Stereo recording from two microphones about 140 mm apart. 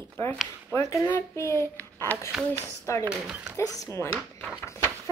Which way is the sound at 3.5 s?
25° left (ahead or behind).